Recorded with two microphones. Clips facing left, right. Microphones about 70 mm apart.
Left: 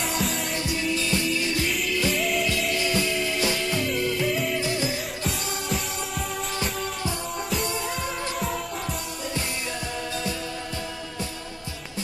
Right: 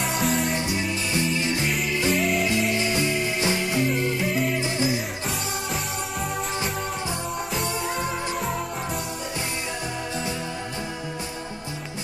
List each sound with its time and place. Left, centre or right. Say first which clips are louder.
0.0 s music: right 3 dB; centre
0.6 s music: even; right
2.1 s music: right 2 dB; centre
2.7 s music: right 1 dB; right
7.5 s music: right 1 dB; centre